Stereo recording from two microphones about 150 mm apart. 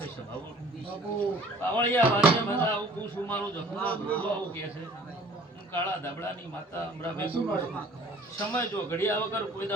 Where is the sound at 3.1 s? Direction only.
10° left (ahead or behind).